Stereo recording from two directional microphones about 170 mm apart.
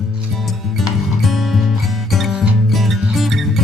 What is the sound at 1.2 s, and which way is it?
Music, centre (ahead or behind).